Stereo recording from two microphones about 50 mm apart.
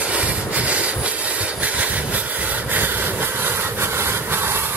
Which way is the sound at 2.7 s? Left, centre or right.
Right.